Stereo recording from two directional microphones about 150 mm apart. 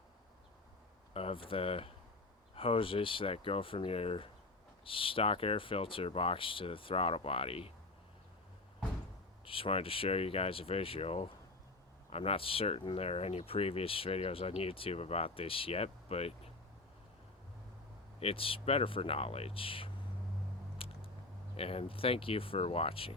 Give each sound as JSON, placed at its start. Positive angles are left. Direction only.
{"t": 1.1, "sound": "speech", "side_deg": 40}
{"t": 9.4, "sound": "speech", "side_deg": 35}
{"t": 18.2, "sound": "speech", "side_deg": 40}
{"t": 20.7, "sound": "biting", "side_deg": 40}
{"t": 21.5, "sound": "speech", "side_deg": 40}